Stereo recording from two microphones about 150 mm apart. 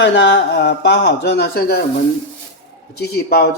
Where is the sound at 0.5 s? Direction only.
90° left.